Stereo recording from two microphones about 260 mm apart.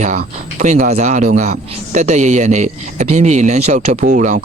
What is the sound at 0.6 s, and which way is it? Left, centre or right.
Speech, right.